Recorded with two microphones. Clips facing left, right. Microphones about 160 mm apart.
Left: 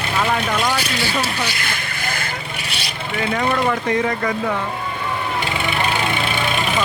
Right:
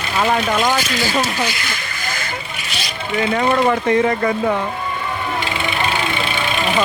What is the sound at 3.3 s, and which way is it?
Speech, 35° right (ahead or behind).